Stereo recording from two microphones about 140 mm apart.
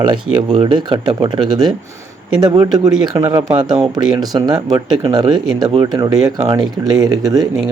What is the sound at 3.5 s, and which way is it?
Speech, 35° right (ahead or behind).